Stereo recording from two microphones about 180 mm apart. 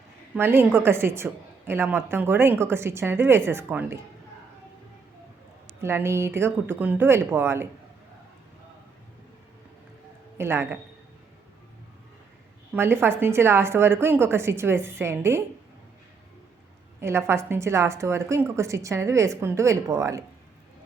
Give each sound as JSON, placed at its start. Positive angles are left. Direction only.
{"t": 0.3, "sound": "a woman's voice", "side_deg": -10}
{"t": 5.8, "sound": "a woman's voice", "side_deg": -15}
{"t": 10.3, "sound": "a man's voice", "side_deg": -15}
{"t": 12.7, "sound": "a woman's voice", "side_deg": -10}
{"t": 17.0, "sound": "a woman's voice", "side_deg": -15}